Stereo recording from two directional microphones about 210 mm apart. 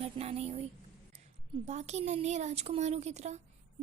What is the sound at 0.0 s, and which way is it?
Speech, 30° right (ahead or behind).